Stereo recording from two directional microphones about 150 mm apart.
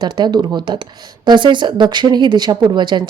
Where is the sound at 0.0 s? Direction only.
25° right (ahead or behind).